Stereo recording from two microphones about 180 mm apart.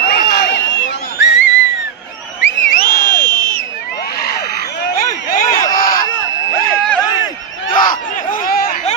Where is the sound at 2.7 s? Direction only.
55° left (ahead or behind).